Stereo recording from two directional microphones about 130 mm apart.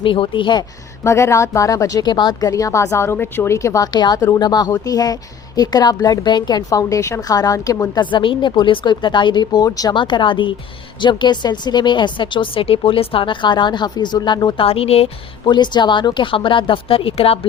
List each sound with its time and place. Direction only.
0.0 s speech: 40° left (ahead or behind)
1.0 s a woman's voice: 20° left (ahead or behind)
8.1 s speech: 40° left (ahead or behind)
15.4 s speech: 35° left (ahead or behind)